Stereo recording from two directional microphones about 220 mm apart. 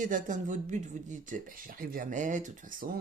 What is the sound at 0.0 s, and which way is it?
Speech, 35° right (ahead or behind).